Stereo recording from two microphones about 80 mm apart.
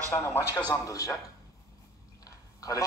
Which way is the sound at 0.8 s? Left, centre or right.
Left.